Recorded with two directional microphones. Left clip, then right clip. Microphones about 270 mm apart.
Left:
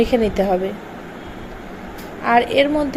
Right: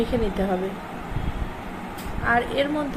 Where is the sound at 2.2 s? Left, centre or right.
Left.